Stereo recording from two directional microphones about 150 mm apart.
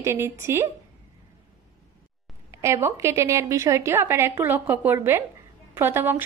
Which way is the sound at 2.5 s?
20° right (ahead or behind).